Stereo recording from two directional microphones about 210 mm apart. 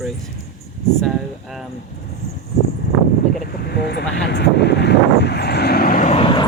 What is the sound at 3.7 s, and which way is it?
Speech, 50° left (ahead or behind).